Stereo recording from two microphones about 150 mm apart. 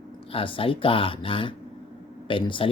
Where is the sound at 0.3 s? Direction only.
35° left (ahead or behind).